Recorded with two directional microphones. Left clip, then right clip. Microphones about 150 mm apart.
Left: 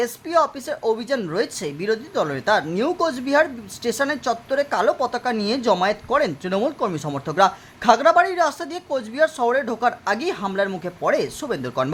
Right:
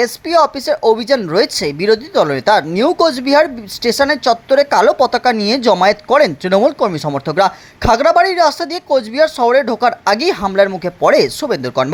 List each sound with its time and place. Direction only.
0.0 s speech: 35° right (ahead or behind)